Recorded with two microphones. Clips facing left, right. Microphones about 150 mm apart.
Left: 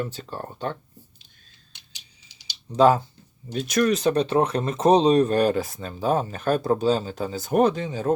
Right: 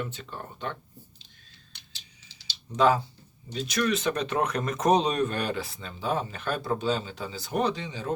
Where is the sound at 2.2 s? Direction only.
15° left (ahead or behind).